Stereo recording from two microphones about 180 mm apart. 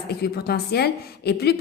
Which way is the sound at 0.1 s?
65° left (ahead or behind).